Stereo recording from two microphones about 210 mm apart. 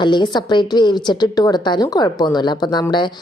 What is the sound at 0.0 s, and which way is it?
A woman's voice, 20° left (ahead or behind).